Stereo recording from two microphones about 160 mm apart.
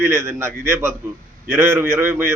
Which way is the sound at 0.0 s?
15° right (ahead or behind).